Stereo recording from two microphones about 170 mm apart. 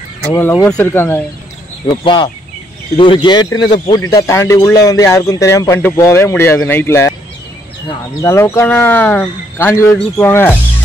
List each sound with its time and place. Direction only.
0.3 s speech: 10° left (ahead or behind)
1.9 s speech: 25° left (ahead or behind)
8.2 s speech: 15° left (ahead or behind)